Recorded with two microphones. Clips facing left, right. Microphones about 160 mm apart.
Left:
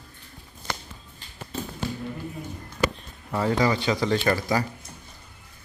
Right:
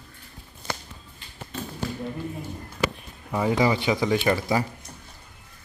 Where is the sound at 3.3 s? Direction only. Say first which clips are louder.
Right 1 dB; 20° right (ahead or behind).